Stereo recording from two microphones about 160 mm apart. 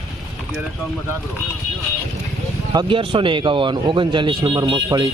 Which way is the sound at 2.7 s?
35° right (ahead or behind).